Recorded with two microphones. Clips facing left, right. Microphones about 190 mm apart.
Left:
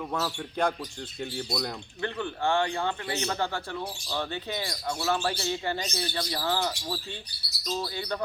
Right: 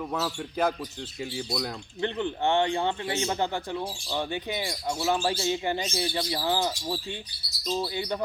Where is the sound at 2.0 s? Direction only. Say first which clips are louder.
Right 3 dB; 20° right (ahead or behind).